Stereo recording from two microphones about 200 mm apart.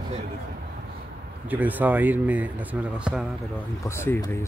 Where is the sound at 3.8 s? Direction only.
10° left (ahead or behind).